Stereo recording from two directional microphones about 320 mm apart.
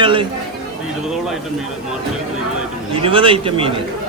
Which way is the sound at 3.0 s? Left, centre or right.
Centre.